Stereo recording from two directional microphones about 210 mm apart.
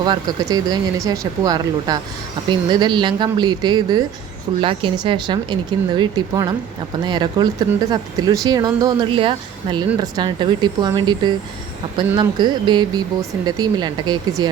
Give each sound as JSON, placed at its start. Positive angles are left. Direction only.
{"t": 0.0, "sound": "speech", "side_deg": -20}